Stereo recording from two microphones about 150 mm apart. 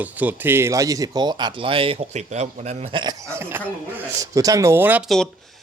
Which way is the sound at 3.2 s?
15° right (ahead or behind).